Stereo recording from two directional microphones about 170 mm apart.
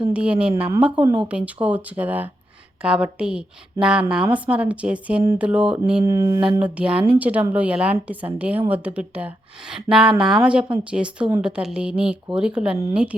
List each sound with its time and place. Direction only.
0.1 s a woman's voice: 5° right (ahead or behind)
6.6 s a woman's voice: 5° right (ahead or behind)